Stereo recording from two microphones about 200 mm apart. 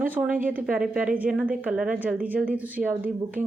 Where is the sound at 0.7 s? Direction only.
5° right (ahead or behind).